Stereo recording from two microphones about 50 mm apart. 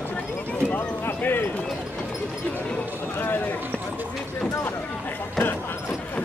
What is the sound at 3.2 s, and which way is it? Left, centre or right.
Speech, left.